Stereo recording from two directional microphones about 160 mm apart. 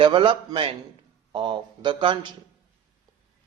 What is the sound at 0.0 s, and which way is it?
Speech, 30° right (ahead or behind).